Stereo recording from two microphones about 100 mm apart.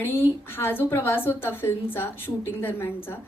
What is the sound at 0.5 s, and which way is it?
A woman's voice, 20° left (ahead or behind).